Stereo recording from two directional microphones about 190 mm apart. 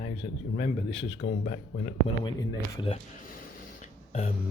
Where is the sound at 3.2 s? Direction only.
45° left (ahead or behind).